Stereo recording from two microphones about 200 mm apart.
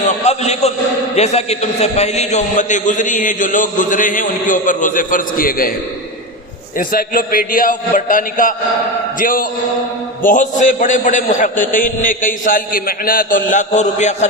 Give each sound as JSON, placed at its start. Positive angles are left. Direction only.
{"t": 0.3, "sound": "a man's voice", "side_deg": 35}
{"t": 6.7, "sound": "a man's voice", "side_deg": 45}